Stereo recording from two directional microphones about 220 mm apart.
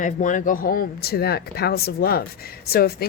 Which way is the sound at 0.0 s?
35° left (ahead or behind).